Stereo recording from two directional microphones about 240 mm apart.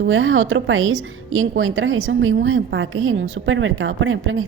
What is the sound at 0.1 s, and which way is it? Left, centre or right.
A woman's voice, right.